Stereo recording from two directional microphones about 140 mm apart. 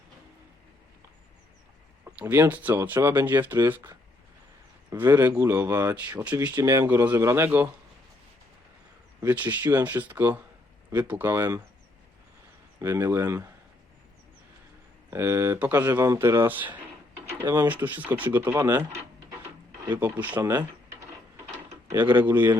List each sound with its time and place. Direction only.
2.1 s speech: 15° right (ahead or behind)
9.2 s speech: 10° right (ahead or behind)
12.8 s speech: 15° right (ahead or behind)
15.1 s speech: 20° right (ahead or behind)
20.0 s speech: 10° right (ahead or behind)
20.4 s drawer open or close: 20° right (ahead or behind)
22.1 s speech: 15° right (ahead or behind)